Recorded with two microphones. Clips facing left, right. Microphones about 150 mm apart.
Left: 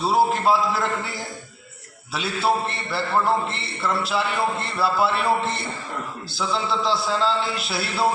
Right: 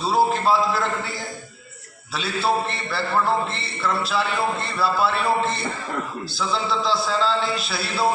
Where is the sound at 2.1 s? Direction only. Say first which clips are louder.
Even; 20° left (ahead or behind).